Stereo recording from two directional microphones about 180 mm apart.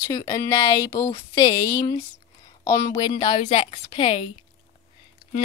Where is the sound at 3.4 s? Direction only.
35° left (ahead or behind).